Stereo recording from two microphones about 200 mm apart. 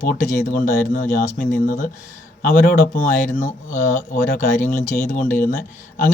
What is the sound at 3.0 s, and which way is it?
Speech, 40° left (ahead or behind).